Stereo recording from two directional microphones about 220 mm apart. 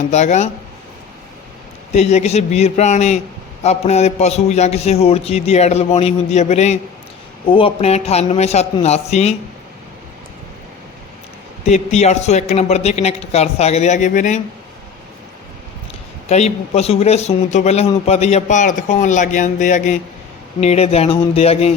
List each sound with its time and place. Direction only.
0.1 s speech: 30° left (ahead or behind)
1.9 s a man's voice: 30° left (ahead or behind)
11.7 s a man's voice: 30° left (ahead or behind)
16.3 s a man's voice: 30° left (ahead or behind)